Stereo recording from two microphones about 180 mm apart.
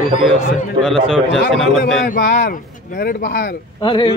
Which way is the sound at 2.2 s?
70° left (ahead or behind).